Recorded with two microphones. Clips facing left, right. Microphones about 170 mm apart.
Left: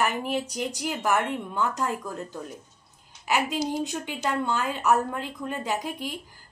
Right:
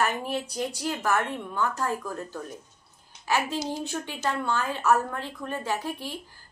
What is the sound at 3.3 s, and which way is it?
A woman's voice, 15° left (ahead or behind).